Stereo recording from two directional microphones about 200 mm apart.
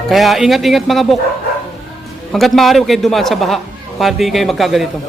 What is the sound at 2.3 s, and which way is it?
A man's voice, centre (ahead or behind).